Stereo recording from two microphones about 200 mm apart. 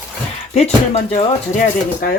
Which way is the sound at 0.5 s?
35° left (ahead or behind).